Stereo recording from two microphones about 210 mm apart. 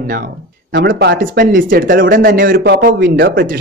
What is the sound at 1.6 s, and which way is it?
A man's voice, 40° right (ahead or behind).